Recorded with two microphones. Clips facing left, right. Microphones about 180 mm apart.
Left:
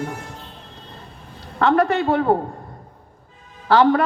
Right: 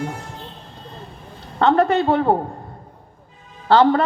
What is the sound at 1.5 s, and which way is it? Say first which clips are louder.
Speech: right 1 dB; 25° right (ahead or behind).